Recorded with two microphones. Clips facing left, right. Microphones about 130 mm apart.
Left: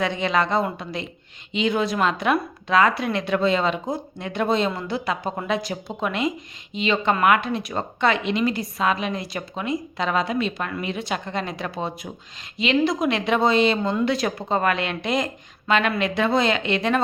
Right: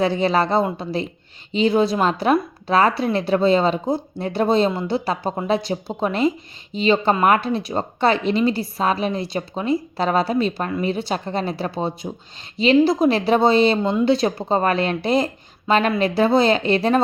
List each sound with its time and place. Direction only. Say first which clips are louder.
0.0 s speech: right 4 dB; 35° right (ahead or behind)